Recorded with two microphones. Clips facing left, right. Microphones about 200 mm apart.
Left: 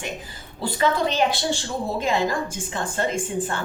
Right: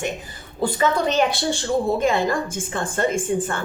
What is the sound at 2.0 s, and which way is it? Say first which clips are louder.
A woman's voice: right 3 dB; 50° right (ahead or behind).